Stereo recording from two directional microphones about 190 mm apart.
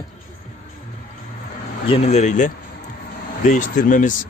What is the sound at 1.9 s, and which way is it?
Speech, 35° left (ahead or behind).